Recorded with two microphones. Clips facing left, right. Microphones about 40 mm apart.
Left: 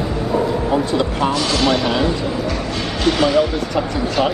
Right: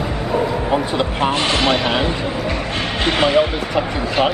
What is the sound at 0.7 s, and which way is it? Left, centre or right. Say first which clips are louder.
Speech: left 1 dB; right.